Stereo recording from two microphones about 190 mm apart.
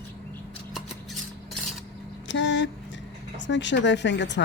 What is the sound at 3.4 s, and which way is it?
Speech, 70° left (ahead or behind).